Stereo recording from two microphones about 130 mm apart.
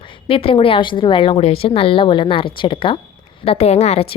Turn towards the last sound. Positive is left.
turn(degrees=55)  # may be behind; listen again after turning